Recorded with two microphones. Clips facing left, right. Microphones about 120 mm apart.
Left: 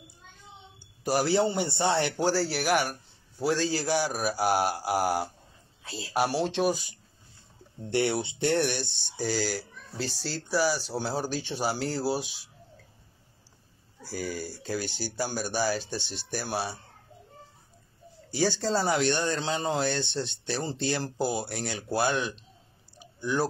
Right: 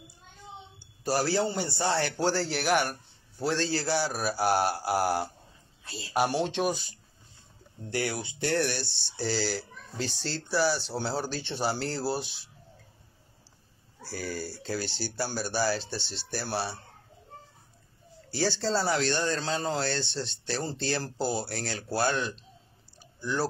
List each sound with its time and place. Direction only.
0.7 s a man's voice: 15° left (ahead or behind)
2.3 s speech: 5° left (ahead or behind)
7.9 s speech: 25° left (ahead or behind)
9.2 s speech: 5° left (ahead or behind)
14.0 s speech: 10° left (ahead or behind)
18.3 s speech: 15° left (ahead or behind)
22.9 s clicking: 15° left (ahead or behind)